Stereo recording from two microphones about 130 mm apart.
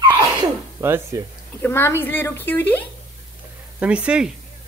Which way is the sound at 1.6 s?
20° left (ahead or behind).